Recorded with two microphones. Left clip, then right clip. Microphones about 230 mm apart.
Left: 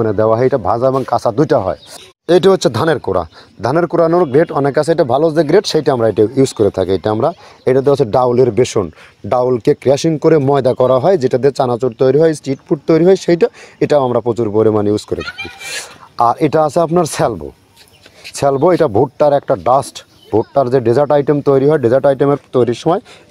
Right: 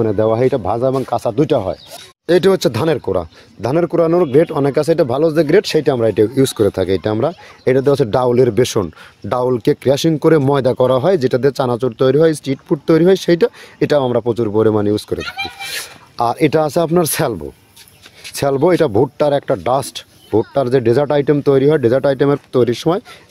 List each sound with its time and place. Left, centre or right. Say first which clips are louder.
0.0 s speech: left 2 dB; centre
15.1 s a child's voice: right 1 dB; right
15.6 s speech: even; centre